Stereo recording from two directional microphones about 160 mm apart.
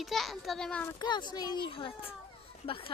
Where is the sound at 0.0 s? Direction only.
Centre (ahead or behind).